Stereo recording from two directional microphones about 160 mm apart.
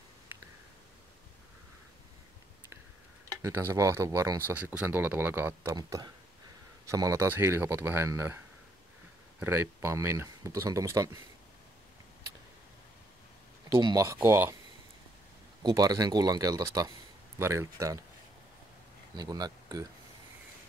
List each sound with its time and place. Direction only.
3.4 s speech: 15° right (ahead or behind)
9.4 s speech: 15° right (ahead or behind)
13.7 s speech: 30° right (ahead or behind)
14.0 s speech: 20° right (ahead or behind)
15.7 s speech: 25° right (ahead or behind)
19.1 s speech: 25° right (ahead or behind)